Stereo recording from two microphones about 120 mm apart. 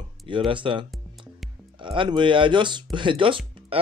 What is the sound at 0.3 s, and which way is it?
Speech, 45° right (ahead or behind).